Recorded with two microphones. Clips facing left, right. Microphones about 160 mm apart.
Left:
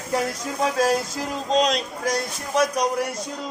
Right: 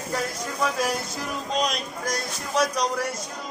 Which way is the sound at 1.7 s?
60° left (ahead or behind).